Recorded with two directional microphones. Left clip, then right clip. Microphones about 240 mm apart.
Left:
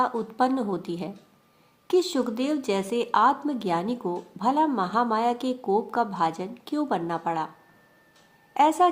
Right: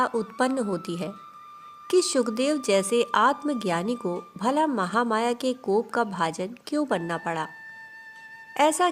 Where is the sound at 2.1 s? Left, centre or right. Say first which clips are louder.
Right 3 dB; right.